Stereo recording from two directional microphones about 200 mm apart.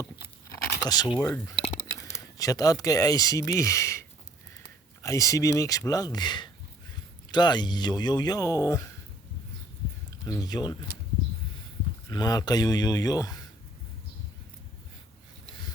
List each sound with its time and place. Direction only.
0.8 s speech: 20° left (ahead or behind)
5.0 s speech: 15° left (ahead or behind)
10.2 s speech: 15° left (ahead or behind)
12.0 s speech: 20° left (ahead or behind)